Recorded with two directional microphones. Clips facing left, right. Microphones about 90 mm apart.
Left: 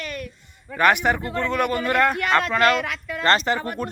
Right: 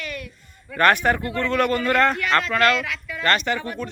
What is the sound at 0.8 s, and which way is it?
Speech, 15° left (ahead or behind).